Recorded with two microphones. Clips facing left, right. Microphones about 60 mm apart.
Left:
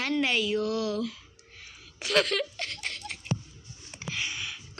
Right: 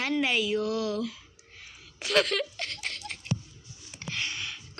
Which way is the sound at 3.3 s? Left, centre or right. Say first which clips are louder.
Even; left.